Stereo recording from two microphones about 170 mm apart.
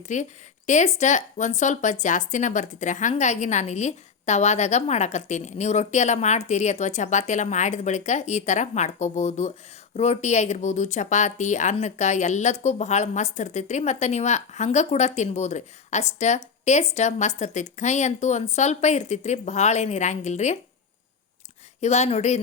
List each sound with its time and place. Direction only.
0.1 s speech: 45° left (ahead or behind)
21.8 s speech: 40° left (ahead or behind)